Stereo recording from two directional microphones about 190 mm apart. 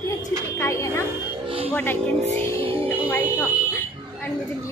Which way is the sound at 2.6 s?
30° right (ahead or behind).